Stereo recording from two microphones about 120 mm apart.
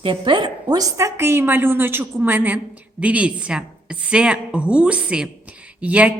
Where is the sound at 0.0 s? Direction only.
45° right (ahead or behind).